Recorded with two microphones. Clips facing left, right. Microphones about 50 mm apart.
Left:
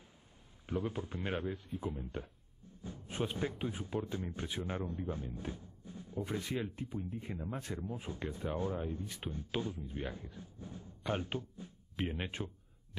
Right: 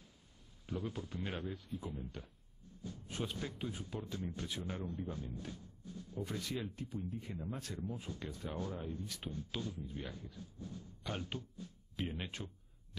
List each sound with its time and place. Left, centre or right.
0.7 s a man's voice: left